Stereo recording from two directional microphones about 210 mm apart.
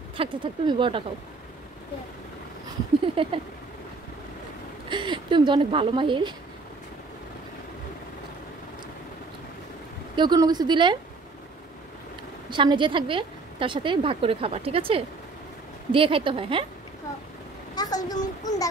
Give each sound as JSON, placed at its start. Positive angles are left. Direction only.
{"t": 0.2, "sound": "a woman's voice", "side_deg": -25}
{"t": 3.2, "sound": "a woman's voice", "side_deg": -25}
{"t": 4.8, "sound": "a woman's voice", "side_deg": -20}
{"t": 10.1, "sound": "a woman's voice", "side_deg": -20}
{"t": 12.4, "sound": "a woman's voice", "side_deg": -25}
{"t": 17.7, "sound": "a child's voice", "side_deg": 20}